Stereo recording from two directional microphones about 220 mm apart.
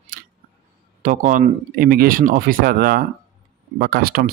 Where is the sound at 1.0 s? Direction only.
35° right (ahead or behind).